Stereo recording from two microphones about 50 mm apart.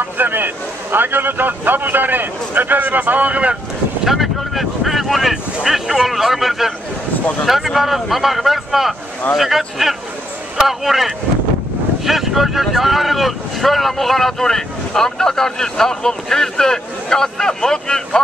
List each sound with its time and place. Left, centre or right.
0.0 s a sound: right
0.9 s speech: right
4.0 s speech: centre